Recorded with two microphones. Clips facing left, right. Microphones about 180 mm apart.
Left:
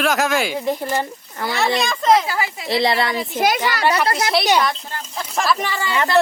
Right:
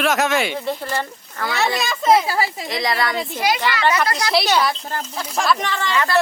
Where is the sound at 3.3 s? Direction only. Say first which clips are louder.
Left 4 dB; 45° left (ahead or behind).